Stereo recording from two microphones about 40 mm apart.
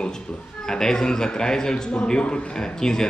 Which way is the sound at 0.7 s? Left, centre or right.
Centre.